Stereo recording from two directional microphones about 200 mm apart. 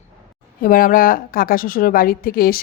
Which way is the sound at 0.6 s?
45° left (ahead or behind).